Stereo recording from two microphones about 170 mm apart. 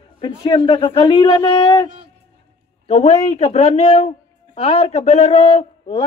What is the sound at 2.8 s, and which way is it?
Speech, 40° left (ahead or behind).